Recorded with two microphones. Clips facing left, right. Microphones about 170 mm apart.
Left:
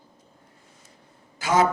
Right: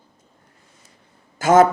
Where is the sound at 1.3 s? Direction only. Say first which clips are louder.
Right 8 dB; 50° right (ahead or behind).